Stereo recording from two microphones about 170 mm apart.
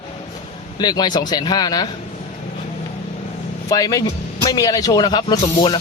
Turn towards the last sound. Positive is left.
turn(degrees=25)  # may be behind; listen again after turning